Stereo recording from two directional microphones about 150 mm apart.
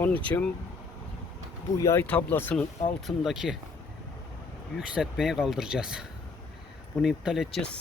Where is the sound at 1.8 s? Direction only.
15° left (ahead or behind).